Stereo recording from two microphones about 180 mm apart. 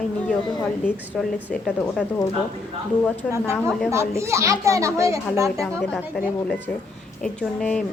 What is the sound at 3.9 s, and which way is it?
A child's voice, 15° right (ahead or behind).